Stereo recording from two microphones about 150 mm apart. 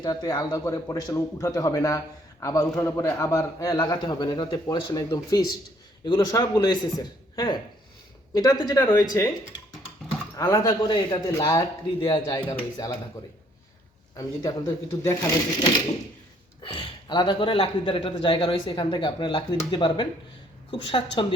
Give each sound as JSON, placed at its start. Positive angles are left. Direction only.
{"t": 0.0, "sound": "a man's voice", "side_deg": 30}
{"t": 10.3, "sound": "a man's voice", "side_deg": 20}
{"t": 14.2, "sound": "a man's voice", "side_deg": 20}